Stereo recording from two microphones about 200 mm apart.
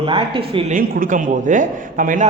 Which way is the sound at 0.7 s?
45° right (ahead or behind).